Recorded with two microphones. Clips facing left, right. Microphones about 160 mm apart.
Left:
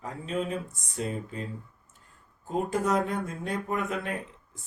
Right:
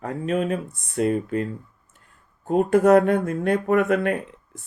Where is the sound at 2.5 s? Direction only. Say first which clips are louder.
Right 11 dB; 65° right (ahead or behind).